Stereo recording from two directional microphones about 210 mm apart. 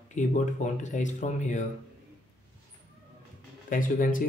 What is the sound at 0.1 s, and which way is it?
Speech, 35° left (ahead or behind).